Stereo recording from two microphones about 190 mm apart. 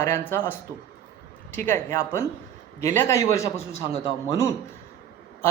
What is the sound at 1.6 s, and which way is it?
Speech, 15° left (ahead or behind).